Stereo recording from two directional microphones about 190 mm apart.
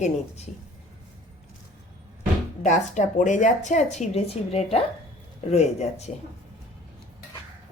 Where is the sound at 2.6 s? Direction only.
40° left (ahead or behind).